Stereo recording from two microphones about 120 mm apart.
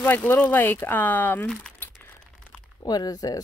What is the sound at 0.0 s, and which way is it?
Speech, 15° left (ahead or behind).